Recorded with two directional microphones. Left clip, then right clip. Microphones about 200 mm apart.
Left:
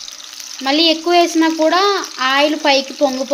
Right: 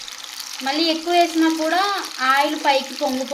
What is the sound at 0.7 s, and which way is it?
Speech, 45° left (ahead or behind).